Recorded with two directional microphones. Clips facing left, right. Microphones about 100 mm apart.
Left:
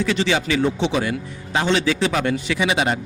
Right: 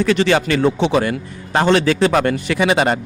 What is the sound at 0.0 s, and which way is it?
A man's voice, 55° right (ahead or behind).